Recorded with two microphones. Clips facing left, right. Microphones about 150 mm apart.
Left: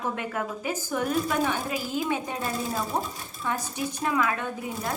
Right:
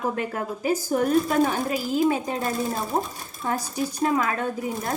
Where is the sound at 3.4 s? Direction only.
35° right (ahead or behind).